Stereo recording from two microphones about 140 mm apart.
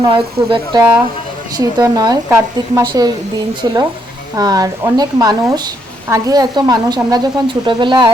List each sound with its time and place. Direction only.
0.0 s a woman's voice: 35° right (ahead or behind)
0.8 s speech: 15° right (ahead or behind)
1.5 s a woman's voice: 25° right (ahead or behind)